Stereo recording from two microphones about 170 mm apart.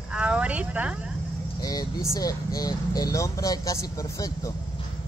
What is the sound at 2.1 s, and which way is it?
Speech, 20° left (ahead or behind).